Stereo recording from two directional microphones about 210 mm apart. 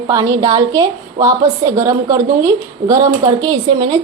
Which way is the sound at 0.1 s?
15° right (ahead or behind).